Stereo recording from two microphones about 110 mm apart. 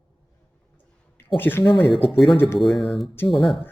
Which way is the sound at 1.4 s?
20° left (ahead or behind).